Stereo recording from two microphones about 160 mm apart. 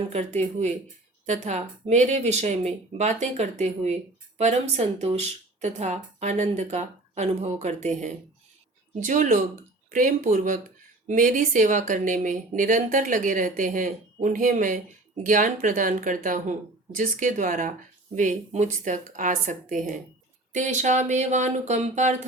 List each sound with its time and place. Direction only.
0.1 s speech: 45° right (ahead or behind)